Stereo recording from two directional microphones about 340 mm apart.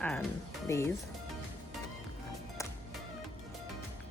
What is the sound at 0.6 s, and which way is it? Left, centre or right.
Speech, centre.